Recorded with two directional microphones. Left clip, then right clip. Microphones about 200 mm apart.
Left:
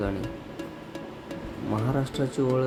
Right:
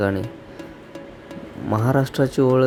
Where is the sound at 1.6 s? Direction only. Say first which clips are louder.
Right 8 dB; 40° right (ahead or behind).